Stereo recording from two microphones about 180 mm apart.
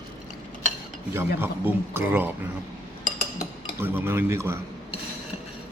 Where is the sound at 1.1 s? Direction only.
10° right (ahead or behind).